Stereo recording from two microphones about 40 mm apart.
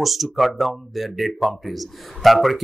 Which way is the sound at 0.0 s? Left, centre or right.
Centre.